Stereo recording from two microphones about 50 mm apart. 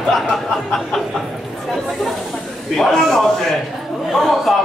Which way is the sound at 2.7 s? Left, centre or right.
Centre.